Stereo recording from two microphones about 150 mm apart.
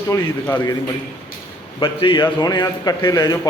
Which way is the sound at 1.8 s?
35° left (ahead or behind).